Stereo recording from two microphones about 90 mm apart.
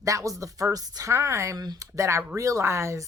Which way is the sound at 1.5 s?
45° right (ahead or behind).